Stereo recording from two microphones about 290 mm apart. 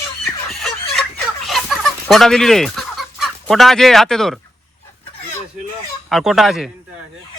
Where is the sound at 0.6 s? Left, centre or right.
Centre.